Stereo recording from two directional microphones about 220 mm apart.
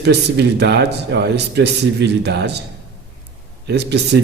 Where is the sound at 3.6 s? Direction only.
50° right (ahead or behind).